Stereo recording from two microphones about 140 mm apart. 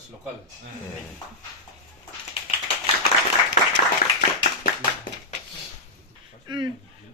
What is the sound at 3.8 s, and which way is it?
Clapping, 65° left (ahead or behind).